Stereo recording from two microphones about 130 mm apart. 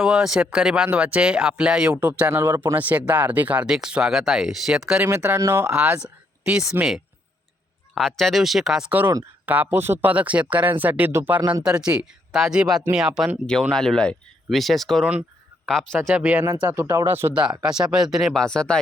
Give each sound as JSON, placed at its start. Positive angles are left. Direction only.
{"t": 0.0, "sound": "speech", "side_deg": -5}
{"t": 5.0, "sound": "speech", "side_deg": -15}
{"t": 16.0, "sound": "speech", "side_deg": -10}
{"t": 17.6, "sound": "speech", "side_deg": -5}